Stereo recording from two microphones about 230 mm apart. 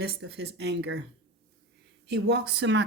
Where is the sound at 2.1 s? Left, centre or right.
Right.